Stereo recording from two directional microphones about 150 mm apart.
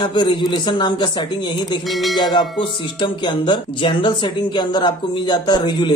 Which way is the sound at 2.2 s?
30° left (ahead or behind).